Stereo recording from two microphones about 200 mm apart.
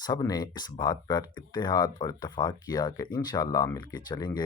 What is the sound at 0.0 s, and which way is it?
Speech, 20° left (ahead or behind).